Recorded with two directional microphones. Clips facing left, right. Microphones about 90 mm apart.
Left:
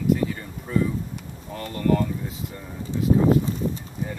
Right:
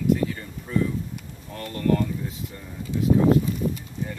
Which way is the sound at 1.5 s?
5° left (ahead or behind).